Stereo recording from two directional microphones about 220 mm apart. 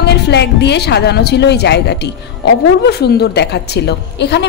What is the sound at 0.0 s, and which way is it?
A woman's voice, 50° left (ahead or behind).